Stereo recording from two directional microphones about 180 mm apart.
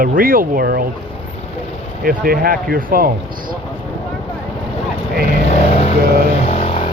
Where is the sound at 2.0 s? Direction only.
55° right (ahead or behind).